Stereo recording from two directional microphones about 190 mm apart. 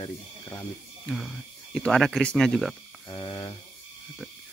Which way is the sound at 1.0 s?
Centre (ahead or behind).